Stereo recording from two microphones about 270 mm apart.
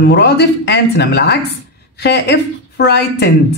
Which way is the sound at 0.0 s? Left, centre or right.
Left.